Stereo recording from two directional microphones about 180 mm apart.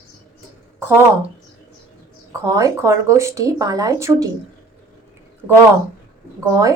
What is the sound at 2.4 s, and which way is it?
Speech, 20° right (ahead or behind).